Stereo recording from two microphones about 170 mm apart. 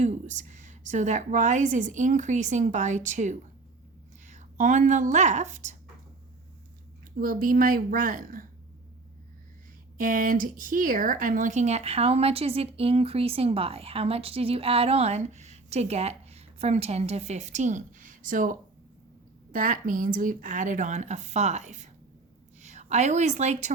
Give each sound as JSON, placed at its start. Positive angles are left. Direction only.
{"t": 0.0, "sound": "a woman's voice", "side_deg": -45}
{"t": 7.2, "sound": "a woman's voice", "side_deg": -55}
{"t": 10.0, "sound": "speech", "side_deg": -55}
{"t": 19.5, "sound": "a woman's voice", "side_deg": -55}